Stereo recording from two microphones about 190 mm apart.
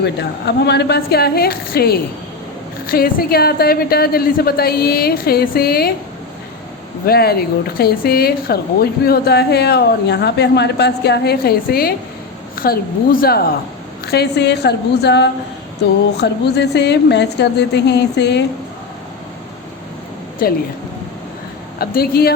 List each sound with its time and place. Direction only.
0.0 s a woman's voice: 60° left (ahead or behind)
7.0 s a woman's voice: 55° left (ahead or behind)
20.4 s a woman's voice: 50° left (ahead or behind)
21.8 s a woman's voice: 55° left (ahead or behind)